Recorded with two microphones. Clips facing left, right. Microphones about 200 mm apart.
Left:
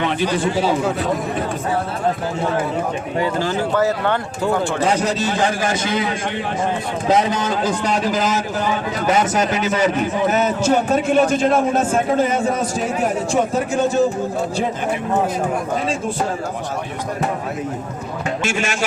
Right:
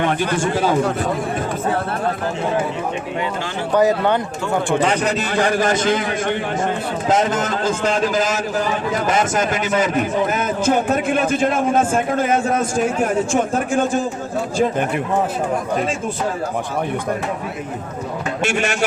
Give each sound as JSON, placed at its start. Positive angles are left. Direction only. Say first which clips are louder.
{"t": 0.0, "sound": "a man's voice", "louder": "even", "side_deg": -50}
{"t": 3.8, "sound": "speech", "louder": "right 5 dB", "side_deg": -15}
{"t": 4.9, "sound": "a man's voice", "louder": "left 1 dB", "side_deg": -60}
{"t": 18.4, "sound": "a man's voice", "louder": "right 4 dB", "side_deg": -60}